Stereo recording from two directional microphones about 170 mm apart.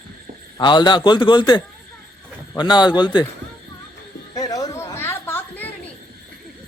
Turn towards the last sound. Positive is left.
turn(degrees=10)  # may be behind; listen again after turning